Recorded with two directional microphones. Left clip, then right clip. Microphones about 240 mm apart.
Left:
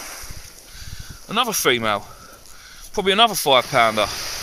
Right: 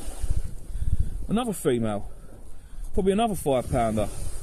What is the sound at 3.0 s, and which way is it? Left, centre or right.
Speech, centre.